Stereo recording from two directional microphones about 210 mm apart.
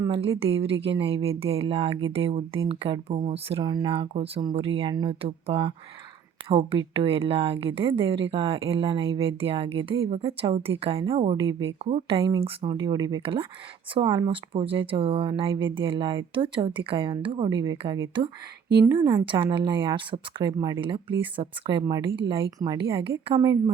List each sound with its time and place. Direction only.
0.0 s speech: 25° right (ahead or behind)